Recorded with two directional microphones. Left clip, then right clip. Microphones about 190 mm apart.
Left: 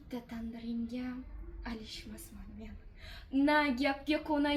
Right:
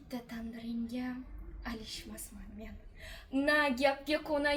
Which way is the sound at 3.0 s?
25° right (ahead or behind).